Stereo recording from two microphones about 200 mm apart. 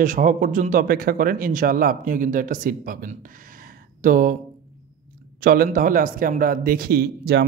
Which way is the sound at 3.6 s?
45° right (ahead or behind).